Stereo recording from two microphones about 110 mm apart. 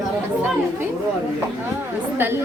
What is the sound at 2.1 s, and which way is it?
Speech, 20° right (ahead or behind).